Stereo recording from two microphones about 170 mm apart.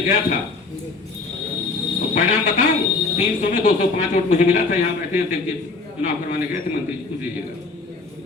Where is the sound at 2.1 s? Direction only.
45° left (ahead or behind).